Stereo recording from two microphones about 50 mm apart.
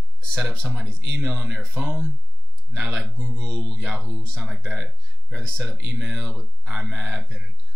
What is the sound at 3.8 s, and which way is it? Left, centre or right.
Speech, centre.